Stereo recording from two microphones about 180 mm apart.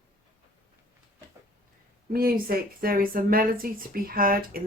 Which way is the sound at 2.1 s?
55° right (ahead or behind).